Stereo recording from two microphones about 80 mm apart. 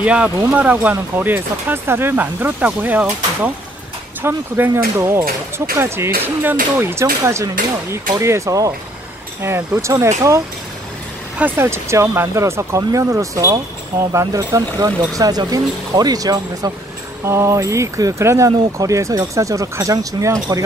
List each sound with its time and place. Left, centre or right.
0.0 s speech: centre; by 10.4 s right
11.5 s speech: right
17.2 s speech: right